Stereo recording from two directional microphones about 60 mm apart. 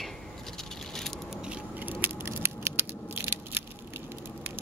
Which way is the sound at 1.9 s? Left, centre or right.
Right.